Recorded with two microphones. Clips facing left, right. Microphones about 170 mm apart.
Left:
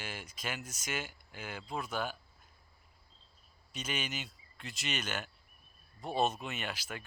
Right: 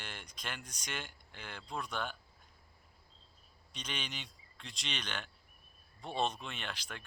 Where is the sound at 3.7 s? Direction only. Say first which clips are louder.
Left 5 dB; 5° left (ahead or behind).